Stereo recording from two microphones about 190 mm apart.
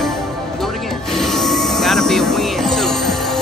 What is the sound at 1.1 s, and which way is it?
Music, centre (ahead or behind).